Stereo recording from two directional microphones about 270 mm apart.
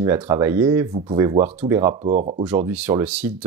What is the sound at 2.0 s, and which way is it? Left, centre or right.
Speech, right.